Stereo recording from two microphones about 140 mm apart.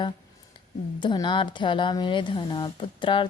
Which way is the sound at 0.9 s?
35° left (ahead or behind).